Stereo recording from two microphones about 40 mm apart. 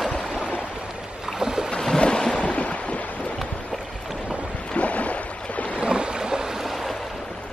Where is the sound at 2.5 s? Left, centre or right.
Left.